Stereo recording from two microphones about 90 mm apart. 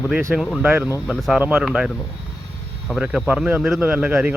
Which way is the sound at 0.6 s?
20° right (ahead or behind).